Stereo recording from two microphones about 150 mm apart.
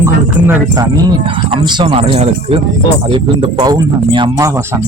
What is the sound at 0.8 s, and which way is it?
Speech, 25° right (ahead or behind).